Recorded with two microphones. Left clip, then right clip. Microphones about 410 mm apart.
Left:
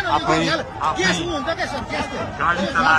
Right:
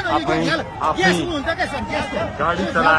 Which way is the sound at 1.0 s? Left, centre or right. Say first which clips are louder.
Right 2 dB; centre.